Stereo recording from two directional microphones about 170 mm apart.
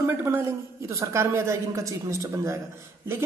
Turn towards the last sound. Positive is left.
turn(degrees=-15)  # may be behind; listen again after turning